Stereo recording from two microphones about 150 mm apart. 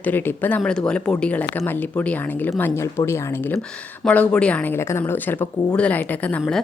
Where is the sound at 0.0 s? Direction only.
15° left (ahead or behind).